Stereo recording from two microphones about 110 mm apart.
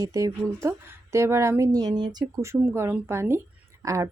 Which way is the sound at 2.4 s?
20° right (ahead or behind).